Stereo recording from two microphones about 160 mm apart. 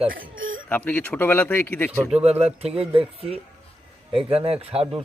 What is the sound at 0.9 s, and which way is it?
Speech, 10° left (ahead or behind).